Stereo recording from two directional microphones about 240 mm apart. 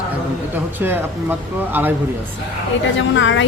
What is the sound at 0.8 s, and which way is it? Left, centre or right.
Speech, centre.